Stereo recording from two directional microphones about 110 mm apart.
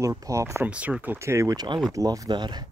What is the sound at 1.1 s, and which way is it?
Speech, 25° right (ahead or behind).